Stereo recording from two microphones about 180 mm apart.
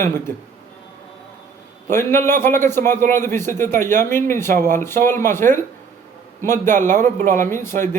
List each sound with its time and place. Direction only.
0.0 s a man's voice: 15° left (ahead or behind)
1.9 s a man's voice: 15° left (ahead or behind)
6.9 s speech: 45° right (ahead or behind)
7.3 s a man's voice: 15° left (ahead or behind)